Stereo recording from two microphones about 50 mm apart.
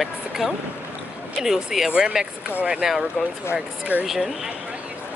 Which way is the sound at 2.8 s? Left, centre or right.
Centre.